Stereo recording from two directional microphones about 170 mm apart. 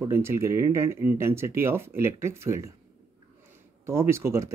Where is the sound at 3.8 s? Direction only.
15° right (ahead or behind).